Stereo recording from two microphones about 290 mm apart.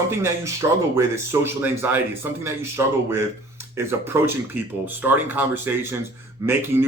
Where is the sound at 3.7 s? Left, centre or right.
Centre.